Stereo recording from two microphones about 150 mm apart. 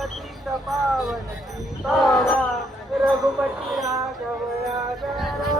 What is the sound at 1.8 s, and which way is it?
Train, centre (ahead or behind).